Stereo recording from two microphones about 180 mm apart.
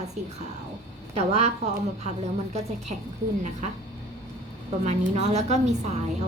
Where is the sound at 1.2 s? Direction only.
35° right (ahead or behind).